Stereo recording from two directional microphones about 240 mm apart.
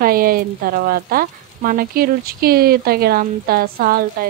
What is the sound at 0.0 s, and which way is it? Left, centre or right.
Speech, right.